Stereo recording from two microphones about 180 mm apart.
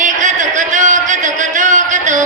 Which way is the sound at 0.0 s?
45° right (ahead or behind).